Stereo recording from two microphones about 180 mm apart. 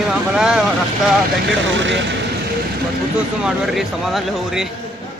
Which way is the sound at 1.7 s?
90° right.